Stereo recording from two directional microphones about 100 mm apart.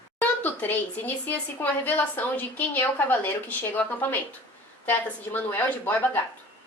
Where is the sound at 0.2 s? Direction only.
20° left (ahead or behind).